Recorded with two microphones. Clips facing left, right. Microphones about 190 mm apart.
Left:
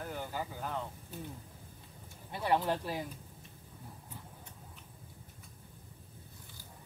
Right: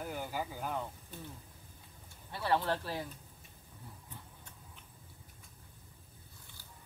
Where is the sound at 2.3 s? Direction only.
15° left (ahead or behind).